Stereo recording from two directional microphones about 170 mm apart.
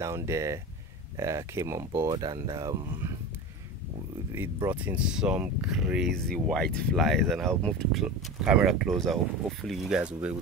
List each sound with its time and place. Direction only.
0.0 s speech: 15° right (ahead or behind)
4.6 s speech: 10° right (ahead or behind)